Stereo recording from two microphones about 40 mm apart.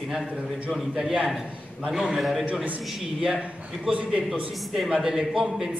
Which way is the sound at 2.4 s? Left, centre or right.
Right.